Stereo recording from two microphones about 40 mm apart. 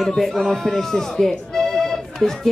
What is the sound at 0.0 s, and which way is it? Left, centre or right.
Speech, centre.